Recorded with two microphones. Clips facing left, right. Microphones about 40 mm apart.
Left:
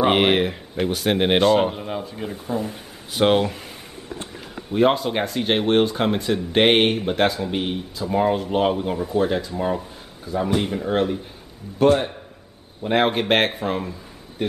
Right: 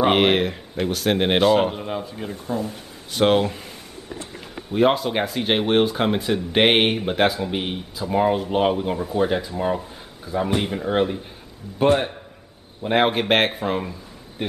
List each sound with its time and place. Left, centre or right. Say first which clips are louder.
0.0 s speech: even; centre
4.7 s speech: even; centre